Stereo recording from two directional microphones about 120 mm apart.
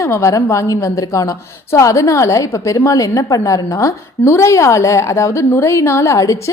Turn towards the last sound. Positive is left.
turn(degrees=25)  # may be behind; listen again after turning